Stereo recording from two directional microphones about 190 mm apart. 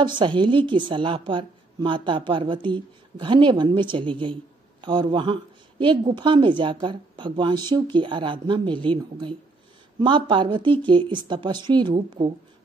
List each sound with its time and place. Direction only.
0.0 s a woman's voice: 25° right (ahead or behind)